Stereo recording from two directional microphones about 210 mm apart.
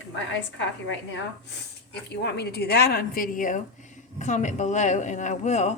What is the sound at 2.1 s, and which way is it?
A woman's voice, 50° left (ahead or behind).